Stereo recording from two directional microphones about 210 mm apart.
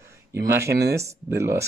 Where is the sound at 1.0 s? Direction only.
15° right (ahead or behind).